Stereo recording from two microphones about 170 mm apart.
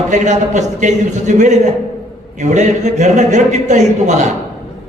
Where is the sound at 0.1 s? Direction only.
45° right (ahead or behind).